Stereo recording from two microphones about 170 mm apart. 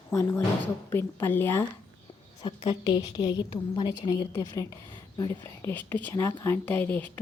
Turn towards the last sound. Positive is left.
turn(degrees=10)  # may be behind; listen again after turning